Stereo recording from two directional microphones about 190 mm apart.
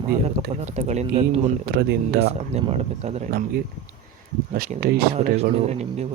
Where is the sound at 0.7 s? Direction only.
35° right (ahead or behind).